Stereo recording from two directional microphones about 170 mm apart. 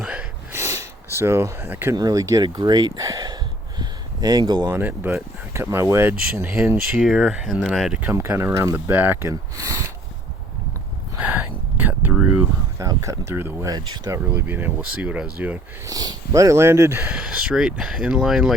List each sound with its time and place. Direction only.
0.0 s a sound: 5° right (ahead or behind); by 4.8 s 25° right (ahead or behind)
4.8 s speech: 10° right (ahead or behind)
11.2 s a sound: 10° right (ahead or behind)
12.8 s speech: 20° right (ahead or behind)
14.3 s speech: 10° right (ahead or behind)
15.9 s speech: 20° right (ahead or behind); by 18.5 s centre (ahead or behind)